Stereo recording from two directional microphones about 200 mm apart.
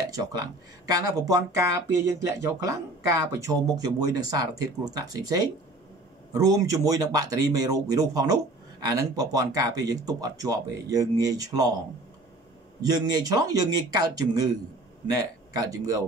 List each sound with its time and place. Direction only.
0.1 s speech: 20° right (ahead or behind)
12.9 s speech: 20° right (ahead or behind)